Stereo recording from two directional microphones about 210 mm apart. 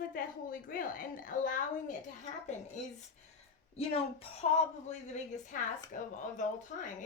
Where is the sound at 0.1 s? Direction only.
40° left (ahead or behind).